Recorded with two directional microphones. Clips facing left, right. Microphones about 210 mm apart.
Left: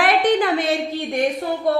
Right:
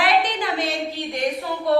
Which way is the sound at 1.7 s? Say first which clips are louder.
Right 1 dB; 50° left (ahead or behind).